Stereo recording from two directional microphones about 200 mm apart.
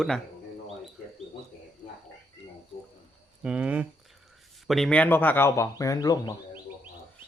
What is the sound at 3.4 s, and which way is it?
Speech, 5° right (ahead or behind).